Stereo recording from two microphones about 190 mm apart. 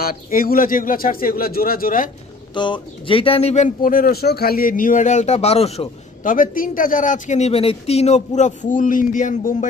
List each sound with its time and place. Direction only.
0.0 s a man's voice: 50° left (ahead or behind)
2.5 s a man's voice: 25° left (ahead or behind); by 9.7 s 45° left (ahead or behind)